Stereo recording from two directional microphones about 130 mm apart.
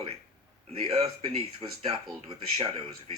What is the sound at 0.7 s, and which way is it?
A man's voice, 50° right (ahead or behind).